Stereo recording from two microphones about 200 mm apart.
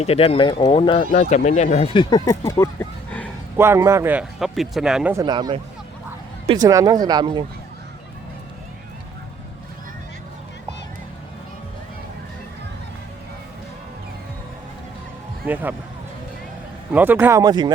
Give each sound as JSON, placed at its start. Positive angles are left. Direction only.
{"t": 0.0, "sound": "speech", "side_deg": 30}
{"t": 3.6, "sound": "speech", "side_deg": -15}
{"t": 5.1, "sound": "speech", "side_deg": -20}
{"t": 15.4, "sound": "speech", "side_deg": -10}
{"t": 16.9, "sound": "speech", "side_deg": -10}